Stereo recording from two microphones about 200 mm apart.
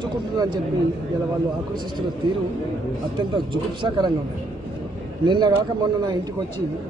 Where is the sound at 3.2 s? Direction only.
25° right (ahead or behind).